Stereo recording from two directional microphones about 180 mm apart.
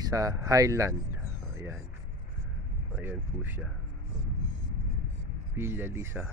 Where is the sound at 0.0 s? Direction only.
20° right (ahead or behind).